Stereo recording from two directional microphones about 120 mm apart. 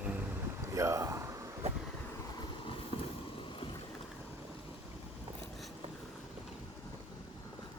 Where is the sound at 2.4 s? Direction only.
45° left (ahead or behind).